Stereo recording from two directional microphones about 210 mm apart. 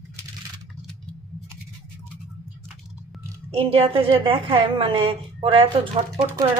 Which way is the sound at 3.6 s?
25° right (ahead or behind).